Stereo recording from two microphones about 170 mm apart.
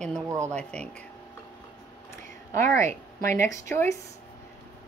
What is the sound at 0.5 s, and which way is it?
Speech, 5° left (ahead or behind).